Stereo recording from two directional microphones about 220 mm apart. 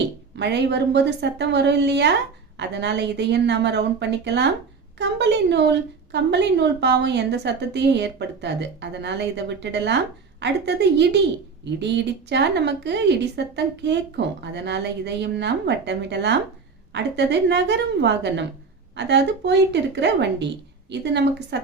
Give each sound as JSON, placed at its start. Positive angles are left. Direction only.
{"t": 0.3, "sound": "a woman's voice", "side_deg": -50}